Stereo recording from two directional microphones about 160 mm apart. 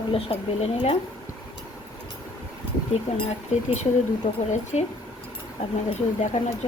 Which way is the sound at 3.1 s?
45° left (ahead or behind).